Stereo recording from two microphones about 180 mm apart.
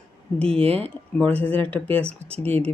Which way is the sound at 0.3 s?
5° left (ahead or behind).